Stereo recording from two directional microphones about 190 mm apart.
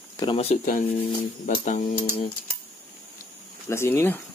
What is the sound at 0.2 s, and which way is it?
Speech, 30° left (ahead or behind).